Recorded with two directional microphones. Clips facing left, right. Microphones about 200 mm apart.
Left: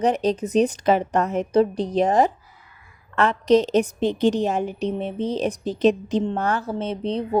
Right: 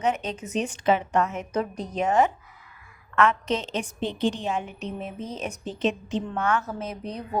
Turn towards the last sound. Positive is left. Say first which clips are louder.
# left 8 dB
turn(degrees=30)  # may be behind; listen again after turning